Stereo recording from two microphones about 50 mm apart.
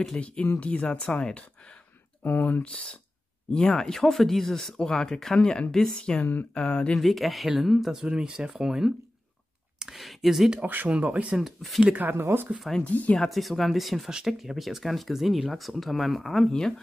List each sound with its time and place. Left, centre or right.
0.2 s speech: left
2.2 s speech: left
3.5 s speech: centre
6.9 s speech: centre
7.9 s speech: centre
9.9 s speech: centre
10.6 s speech: right
10.9 s speech: right
11.3 s speech: centre
11.8 s speech: right
12.1 s speech: right
12.8 s speech: left
13.3 s speech: centre